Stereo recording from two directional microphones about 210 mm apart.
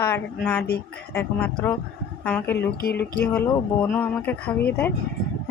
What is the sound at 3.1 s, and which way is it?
Speech, 10° left (ahead or behind).